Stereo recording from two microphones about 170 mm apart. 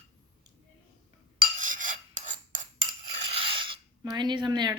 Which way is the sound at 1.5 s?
50° right (ahead or behind).